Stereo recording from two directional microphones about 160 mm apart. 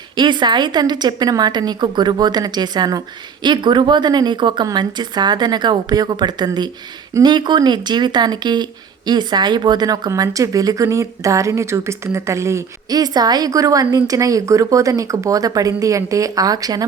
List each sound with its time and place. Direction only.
0.2 s speech: 30° right (ahead or behind)